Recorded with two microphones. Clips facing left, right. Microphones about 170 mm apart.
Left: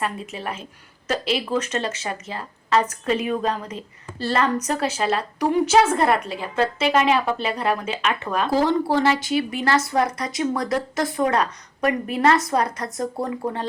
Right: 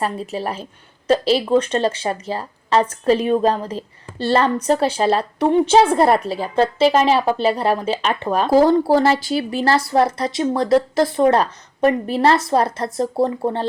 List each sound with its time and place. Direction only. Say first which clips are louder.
0.0 s a woman's voice: right 5 dB; 35° right (ahead or behind)